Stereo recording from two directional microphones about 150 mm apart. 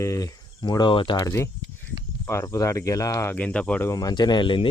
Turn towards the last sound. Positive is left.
turn(degrees=35)  # may be behind; listen again after turning